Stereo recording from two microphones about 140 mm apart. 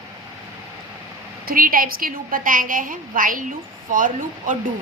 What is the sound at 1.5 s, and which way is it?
A woman's voice, 90° right.